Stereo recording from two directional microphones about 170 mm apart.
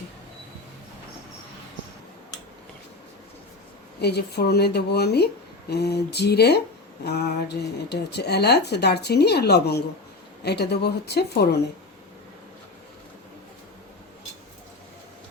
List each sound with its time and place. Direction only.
4.0 s speech: 75° left (ahead or behind)